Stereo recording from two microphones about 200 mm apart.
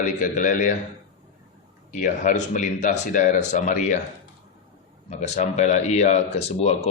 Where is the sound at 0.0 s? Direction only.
40° left (ahead or behind).